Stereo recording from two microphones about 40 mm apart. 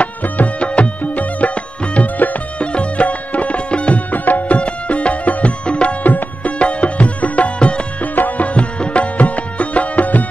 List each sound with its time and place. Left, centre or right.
0.0 s music: left
2.0 s music: left
2.6 s music: left
4.1 s music: left
4.6 s music: left
6.0 s music: left
6.6 s music: left
8.0 s music: left